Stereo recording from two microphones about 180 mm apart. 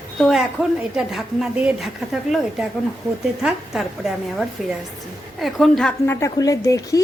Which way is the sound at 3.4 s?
5° right (ahead or behind).